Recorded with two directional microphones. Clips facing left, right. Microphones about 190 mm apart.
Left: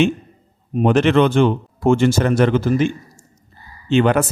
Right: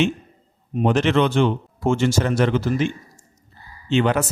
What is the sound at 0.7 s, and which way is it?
A man's voice, 55° left (ahead or behind).